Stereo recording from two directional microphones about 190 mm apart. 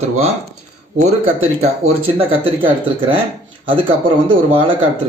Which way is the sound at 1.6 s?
30° right (ahead or behind).